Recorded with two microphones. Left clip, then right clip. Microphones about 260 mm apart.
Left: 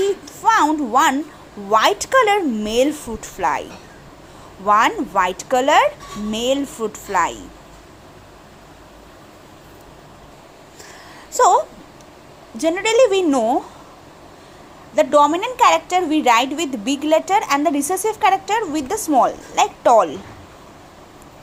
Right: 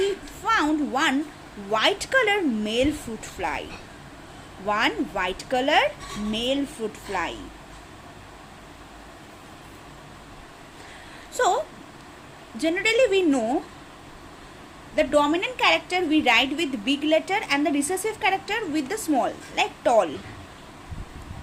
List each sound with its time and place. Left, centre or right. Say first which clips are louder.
0.4 s a child's voice: left 7 dB; centre
11.3 s a woman's voice: left 9 dB; centre
14.9 s a woman's voice: left 7 dB; centre